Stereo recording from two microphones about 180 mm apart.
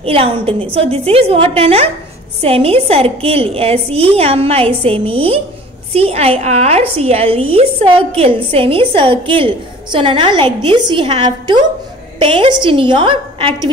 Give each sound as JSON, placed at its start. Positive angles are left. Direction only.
{"t": 0.0, "sound": "a woman's voice", "side_deg": -35}